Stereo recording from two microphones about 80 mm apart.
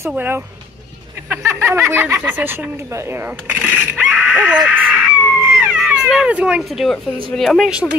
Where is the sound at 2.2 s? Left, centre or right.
Right.